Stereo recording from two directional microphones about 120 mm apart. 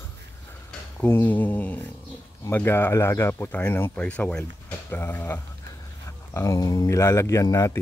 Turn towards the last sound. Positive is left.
turn(degrees=25)  # may be behind; listen again after turning